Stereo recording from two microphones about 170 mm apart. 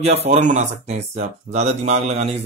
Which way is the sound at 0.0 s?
40° right (ahead or behind).